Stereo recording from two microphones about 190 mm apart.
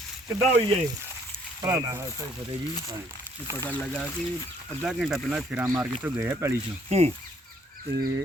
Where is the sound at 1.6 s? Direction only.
15° right (ahead or behind).